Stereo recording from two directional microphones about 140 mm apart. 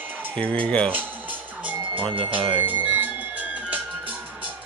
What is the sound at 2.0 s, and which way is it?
Speech, 40° right (ahead or behind).